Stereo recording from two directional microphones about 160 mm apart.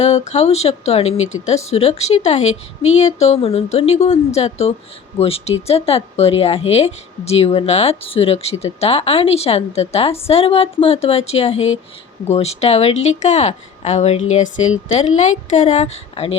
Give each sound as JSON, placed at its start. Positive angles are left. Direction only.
{"t": 0.0, "sound": "a woman's voice", "side_deg": 45}